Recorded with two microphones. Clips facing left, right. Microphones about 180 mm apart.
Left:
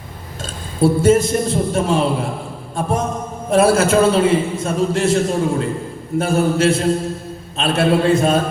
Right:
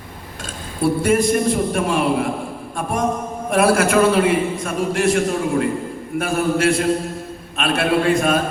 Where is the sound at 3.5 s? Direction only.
25° left (ahead or behind).